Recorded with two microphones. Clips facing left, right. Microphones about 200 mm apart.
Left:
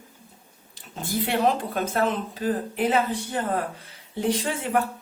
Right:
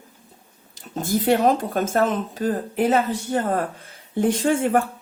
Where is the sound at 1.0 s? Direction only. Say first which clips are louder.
Right 5 dB; 45° right (ahead or behind).